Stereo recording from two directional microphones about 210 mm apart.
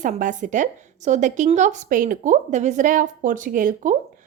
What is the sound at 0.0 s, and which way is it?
Speech, 35° right (ahead or behind).